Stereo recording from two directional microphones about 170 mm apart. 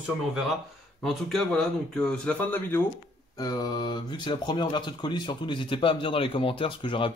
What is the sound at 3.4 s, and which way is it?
Speech, 25° left (ahead or behind).